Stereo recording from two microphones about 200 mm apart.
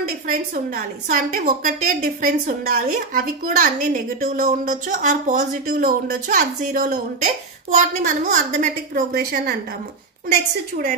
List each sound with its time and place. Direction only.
0.3 s a woman's voice: 40° right (ahead or behind)